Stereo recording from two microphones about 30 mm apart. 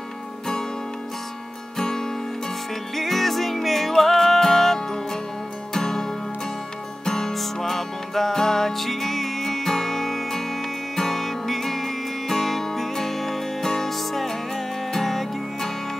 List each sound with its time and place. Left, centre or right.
1.8 s music: centre
3.0 s music: centre